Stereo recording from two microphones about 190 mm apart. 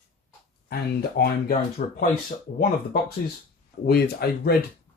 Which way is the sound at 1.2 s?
55° left (ahead or behind).